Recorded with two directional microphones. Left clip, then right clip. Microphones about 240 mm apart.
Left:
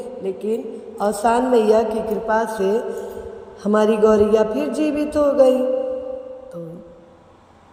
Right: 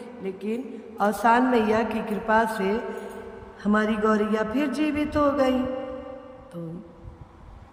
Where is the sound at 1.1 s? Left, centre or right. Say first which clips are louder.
Left 4 dB; centre.